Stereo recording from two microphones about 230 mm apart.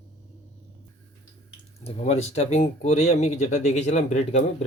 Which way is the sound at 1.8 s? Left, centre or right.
Left.